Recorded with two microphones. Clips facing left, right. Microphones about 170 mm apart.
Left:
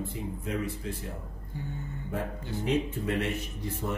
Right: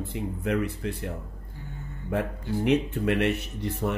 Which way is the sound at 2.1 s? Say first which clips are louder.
Right 7 dB; 70° right (ahead or behind).